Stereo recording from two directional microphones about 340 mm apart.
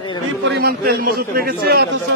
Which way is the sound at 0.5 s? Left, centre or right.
Right.